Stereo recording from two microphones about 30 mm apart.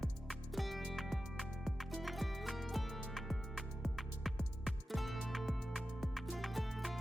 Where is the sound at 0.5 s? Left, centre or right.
Centre.